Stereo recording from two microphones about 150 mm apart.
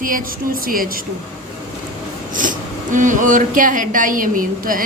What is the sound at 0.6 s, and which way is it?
Speech, 70° right (ahead or behind).